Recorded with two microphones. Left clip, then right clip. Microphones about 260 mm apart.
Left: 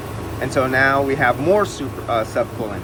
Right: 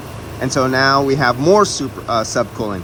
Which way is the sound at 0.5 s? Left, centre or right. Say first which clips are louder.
Right 2 dB; right.